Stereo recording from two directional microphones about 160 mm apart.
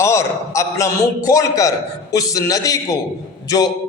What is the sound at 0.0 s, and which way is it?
A man's voice, 20° left (ahead or behind).